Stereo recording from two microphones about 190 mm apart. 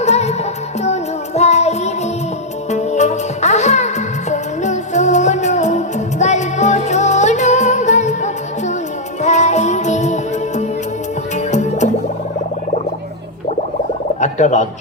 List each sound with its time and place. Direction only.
0.0 s music: 35° left (ahead or behind)
1.4 s music: 35° left (ahead or behind)
11.3 s music: 40° left (ahead or behind)
14.2 s turkey: 40° left (ahead or behind)